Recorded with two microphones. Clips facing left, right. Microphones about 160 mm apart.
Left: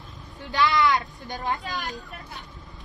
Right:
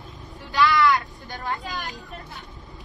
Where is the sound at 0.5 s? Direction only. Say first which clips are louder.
Right 2 dB; 20° left (ahead or behind).